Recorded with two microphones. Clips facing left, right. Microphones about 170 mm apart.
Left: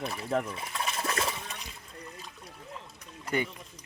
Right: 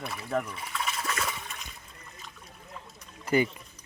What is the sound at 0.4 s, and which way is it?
Water, 30° left (ahead or behind).